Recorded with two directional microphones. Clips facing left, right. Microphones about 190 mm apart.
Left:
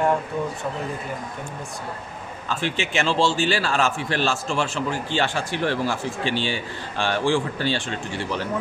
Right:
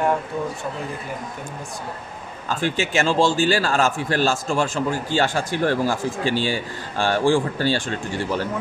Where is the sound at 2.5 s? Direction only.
45° right (ahead or behind).